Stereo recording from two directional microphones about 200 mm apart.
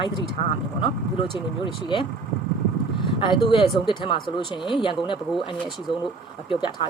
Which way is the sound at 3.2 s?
25° left (ahead or behind).